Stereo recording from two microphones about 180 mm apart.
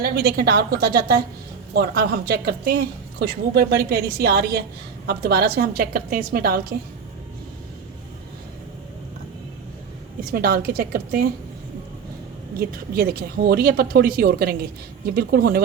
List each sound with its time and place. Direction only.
0.0 s speech: 60° right (ahead or behind)
10.2 s speech: 60° right (ahead or behind)
12.5 s speech: 55° right (ahead or behind)